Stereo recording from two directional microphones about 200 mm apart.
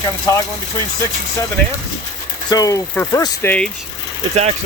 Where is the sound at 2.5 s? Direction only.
15° left (ahead or behind).